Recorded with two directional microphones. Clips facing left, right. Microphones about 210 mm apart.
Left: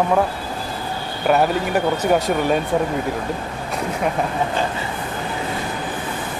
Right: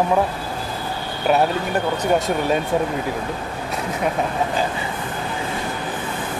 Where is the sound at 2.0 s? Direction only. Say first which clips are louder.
Left 1 dB; centre (ahead or behind).